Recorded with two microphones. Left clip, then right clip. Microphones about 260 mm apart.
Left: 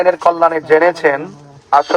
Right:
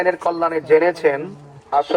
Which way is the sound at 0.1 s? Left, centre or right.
Left.